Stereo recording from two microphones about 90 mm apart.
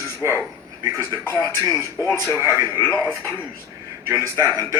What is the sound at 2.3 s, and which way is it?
Speech, 35° right (ahead or behind).